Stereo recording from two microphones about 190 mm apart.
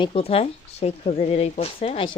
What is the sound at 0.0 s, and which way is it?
Speech, 30° left (ahead or behind).